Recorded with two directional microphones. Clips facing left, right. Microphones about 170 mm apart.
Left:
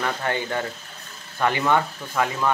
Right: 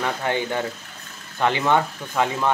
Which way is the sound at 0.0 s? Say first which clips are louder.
Right 2 dB; 15° right (ahead or behind).